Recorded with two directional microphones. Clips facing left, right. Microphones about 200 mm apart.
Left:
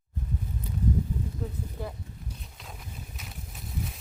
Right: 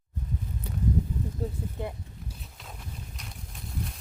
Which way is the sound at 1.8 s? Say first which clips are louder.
Right 2 dB; 20° right (ahead or behind).